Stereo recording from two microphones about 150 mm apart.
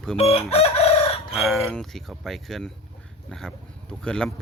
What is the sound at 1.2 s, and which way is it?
Speech, centre (ahead or behind).